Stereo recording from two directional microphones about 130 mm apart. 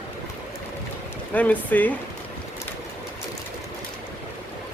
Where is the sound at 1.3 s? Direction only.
10° left (ahead or behind).